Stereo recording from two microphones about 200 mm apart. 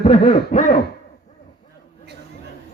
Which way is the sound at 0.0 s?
25° left (ahead or behind).